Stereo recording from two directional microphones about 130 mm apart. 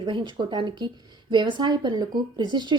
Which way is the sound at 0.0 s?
35° right (ahead or behind).